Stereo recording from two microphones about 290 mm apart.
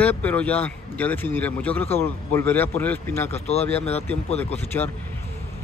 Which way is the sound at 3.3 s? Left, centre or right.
Left.